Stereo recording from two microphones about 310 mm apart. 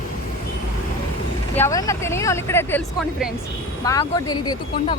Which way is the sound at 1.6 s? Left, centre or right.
Centre.